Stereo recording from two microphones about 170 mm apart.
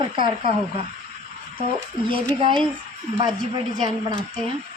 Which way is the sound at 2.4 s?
25° right (ahead or behind).